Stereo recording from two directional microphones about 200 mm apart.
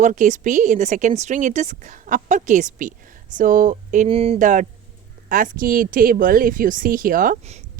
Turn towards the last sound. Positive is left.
turn(degrees=-35)  # may be behind; listen again after turning